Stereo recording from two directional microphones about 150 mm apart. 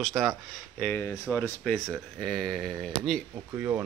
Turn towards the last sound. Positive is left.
turn(degrees=0)  # may be behind; listen again after turning